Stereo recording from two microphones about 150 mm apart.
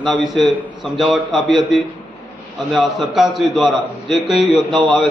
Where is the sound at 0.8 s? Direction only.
Centre (ahead or behind).